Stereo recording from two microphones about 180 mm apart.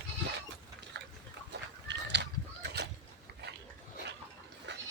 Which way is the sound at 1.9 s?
70° right (ahead or behind).